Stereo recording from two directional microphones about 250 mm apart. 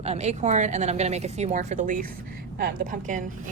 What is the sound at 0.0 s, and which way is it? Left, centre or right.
A woman's voice, right.